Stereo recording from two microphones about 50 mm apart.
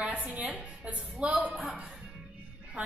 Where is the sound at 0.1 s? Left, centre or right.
Right.